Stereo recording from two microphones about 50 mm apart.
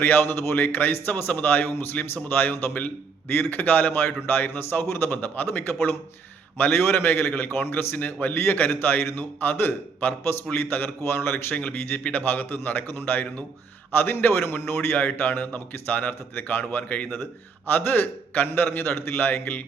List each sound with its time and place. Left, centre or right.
0.0 s a man's voice: left
11.5 s a man's voice: left
14.9 s a man's voice: left